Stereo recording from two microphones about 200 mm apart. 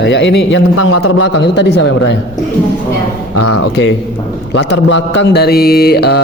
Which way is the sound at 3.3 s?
80° left.